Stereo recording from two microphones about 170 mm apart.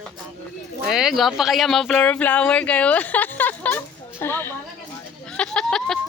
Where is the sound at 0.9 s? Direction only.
Centre (ahead or behind); by 4.5 s 15° left (ahead or behind).